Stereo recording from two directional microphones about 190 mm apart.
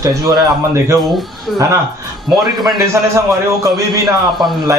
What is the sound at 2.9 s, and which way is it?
A man's voice, 15° right (ahead or behind).